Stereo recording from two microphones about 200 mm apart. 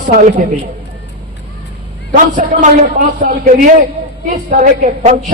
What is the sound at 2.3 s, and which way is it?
A man's voice, 40° right (ahead or behind).